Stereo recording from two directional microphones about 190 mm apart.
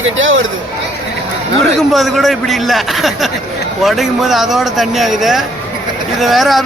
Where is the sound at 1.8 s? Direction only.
Centre (ahead or behind).